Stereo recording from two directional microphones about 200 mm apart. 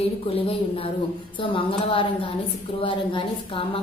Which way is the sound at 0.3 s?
30° left (ahead or behind).